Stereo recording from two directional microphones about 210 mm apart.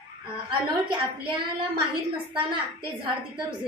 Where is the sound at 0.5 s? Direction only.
25° right (ahead or behind).